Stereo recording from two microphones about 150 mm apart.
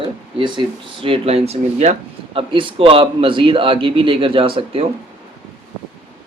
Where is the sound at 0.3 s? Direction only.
30° right (ahead or behind).